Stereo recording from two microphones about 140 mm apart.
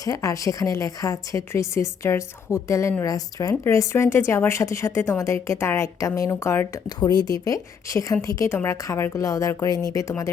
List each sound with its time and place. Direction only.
0.0 s a woman's voice: 20° left (ahead or behind)
6.8 s a woman's voice: 30° left (ahead or behind)